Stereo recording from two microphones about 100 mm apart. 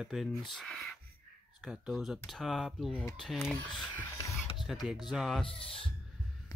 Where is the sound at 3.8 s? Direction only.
35° left (ahead or behind).